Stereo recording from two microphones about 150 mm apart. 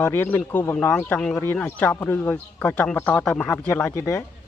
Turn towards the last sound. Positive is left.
turn(degrees=20)  # may be behind; listen again after turning